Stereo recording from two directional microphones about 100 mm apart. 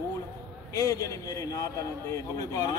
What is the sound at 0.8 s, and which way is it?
Speech, 30° left (ahead or behind).